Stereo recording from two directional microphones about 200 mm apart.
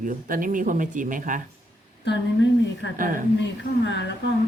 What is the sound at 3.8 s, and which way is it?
Speech, 60° left (ahead or behind).